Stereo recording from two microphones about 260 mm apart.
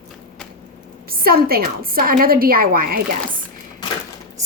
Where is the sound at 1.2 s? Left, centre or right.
Right.